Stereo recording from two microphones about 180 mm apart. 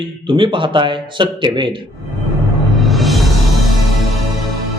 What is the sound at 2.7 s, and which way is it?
Music, centre (ahead or behind).